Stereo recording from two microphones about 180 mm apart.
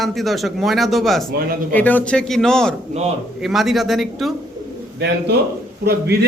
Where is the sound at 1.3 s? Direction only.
55° right (ahead or behind).